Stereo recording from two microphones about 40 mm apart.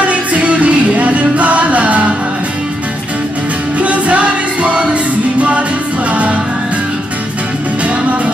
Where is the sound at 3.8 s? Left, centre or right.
Right.